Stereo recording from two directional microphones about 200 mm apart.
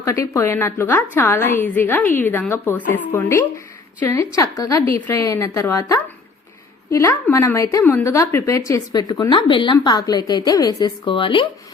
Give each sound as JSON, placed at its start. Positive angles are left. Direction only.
{"t": 0.0, "sound": "a woman's voice", "side_deg": 15}